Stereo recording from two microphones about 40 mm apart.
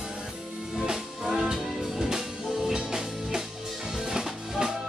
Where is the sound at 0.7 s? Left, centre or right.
Centre.